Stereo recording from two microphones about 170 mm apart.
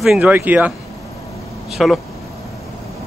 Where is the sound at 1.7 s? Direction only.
Centre (ahead or behind).